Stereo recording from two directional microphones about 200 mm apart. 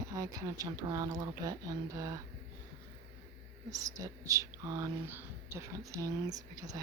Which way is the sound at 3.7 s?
15° right (ahead or behind).